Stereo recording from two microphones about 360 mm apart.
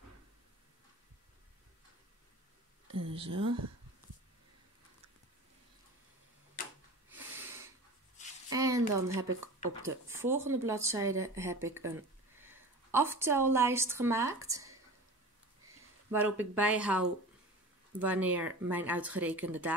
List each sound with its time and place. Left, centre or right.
2.9 s a sound: right
3.3 s speech: right
7.1 s snort: centre
8.5 s a sound: centre
9.3 s speech: right
10.0 s a woman's voice: centre
16.5 s speech: centre